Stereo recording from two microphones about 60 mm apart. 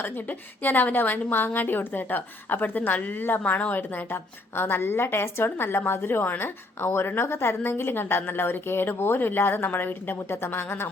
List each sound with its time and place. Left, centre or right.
0.0 s a woman's voice: left